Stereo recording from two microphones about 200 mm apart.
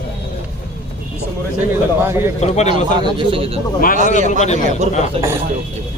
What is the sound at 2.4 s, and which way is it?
Speech, 35° left (ahead or behind).